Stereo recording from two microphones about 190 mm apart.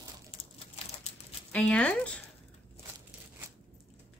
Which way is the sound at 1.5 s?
5° left (ahead or behind).